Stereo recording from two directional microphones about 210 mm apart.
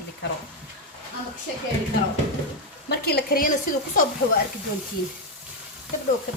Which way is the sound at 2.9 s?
50° left (ahead or behind).